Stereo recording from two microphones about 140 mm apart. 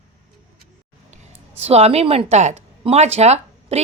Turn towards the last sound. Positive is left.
turn(degrees=-50)  # may be behind; listen again after turning